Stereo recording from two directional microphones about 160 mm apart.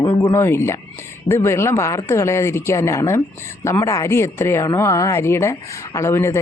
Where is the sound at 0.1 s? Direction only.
15° left (ahead or behind).